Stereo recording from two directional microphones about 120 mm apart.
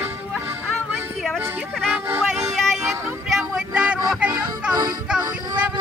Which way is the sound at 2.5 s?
Centre (ahead or behind).